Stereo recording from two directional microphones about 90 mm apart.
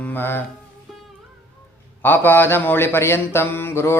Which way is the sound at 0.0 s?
25° left (ahead or behind).